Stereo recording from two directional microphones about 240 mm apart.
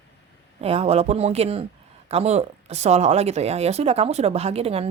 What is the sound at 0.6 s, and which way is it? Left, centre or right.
Speech, right.